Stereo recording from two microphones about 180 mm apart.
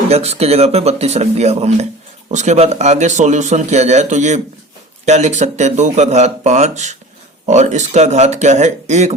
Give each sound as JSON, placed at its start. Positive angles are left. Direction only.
{"t": 0.1, "sound": "speech", "side_deg": -35}